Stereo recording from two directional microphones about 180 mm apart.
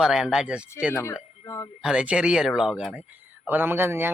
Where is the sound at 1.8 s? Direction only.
5° right (ahead or behind).